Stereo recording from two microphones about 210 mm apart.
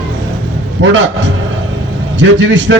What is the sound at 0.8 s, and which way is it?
Speech, 60° right (ahead or behind).